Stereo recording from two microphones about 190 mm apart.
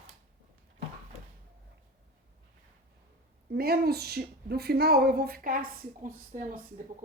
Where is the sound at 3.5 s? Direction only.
55° right (ahead or behind).